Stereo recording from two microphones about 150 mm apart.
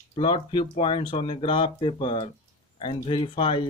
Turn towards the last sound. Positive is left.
turn(degrees=35)  # may be behind; listen again after turning